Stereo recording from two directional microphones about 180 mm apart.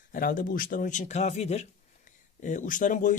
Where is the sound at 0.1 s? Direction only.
50° left (ahead or behind).